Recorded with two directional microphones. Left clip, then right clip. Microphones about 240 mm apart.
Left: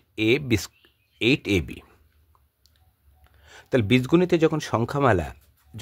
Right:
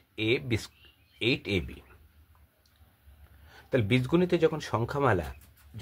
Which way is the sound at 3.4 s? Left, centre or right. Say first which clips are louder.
Left 5 dB; left.